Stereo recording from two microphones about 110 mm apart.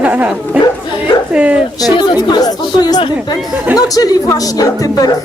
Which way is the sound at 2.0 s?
40° left (ahead or behind).